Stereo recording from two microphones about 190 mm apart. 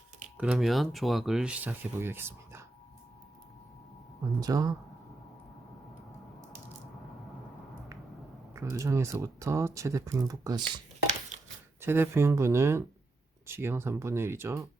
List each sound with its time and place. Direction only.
0.3 s speech: 5° right (ahead or behind)
4.4 s speech: 20° right (ahead or behind)
8.5 s speech: 15° right (ahead or behind)
11.8 s speech: 10° right (ahead or behind)